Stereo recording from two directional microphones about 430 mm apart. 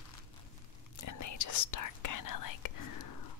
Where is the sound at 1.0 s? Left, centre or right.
Left.